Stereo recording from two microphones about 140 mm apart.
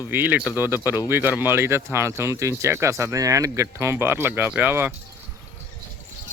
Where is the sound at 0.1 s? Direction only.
15° right (ahead or behind).